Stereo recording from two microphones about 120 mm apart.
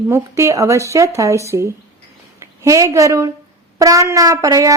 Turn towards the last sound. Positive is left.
turn(degrees=-30)  # may be behind; listen again after turning